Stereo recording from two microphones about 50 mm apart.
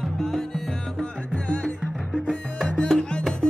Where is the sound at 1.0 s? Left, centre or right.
Left.